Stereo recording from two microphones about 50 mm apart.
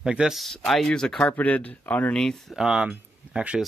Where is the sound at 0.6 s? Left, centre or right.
Centre.